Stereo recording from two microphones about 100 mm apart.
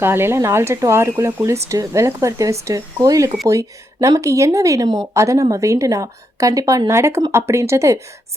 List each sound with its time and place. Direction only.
0.0 s a woman's voice: 25° right (ahead or behind)